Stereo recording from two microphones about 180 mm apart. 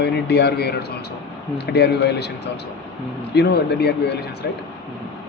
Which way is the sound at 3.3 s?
65° left (ahead or behind).